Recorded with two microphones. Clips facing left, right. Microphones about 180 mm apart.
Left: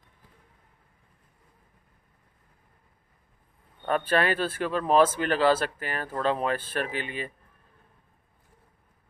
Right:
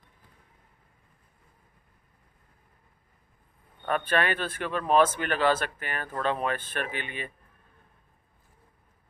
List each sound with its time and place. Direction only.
3.8 s speech: 30° left (ahead or behind)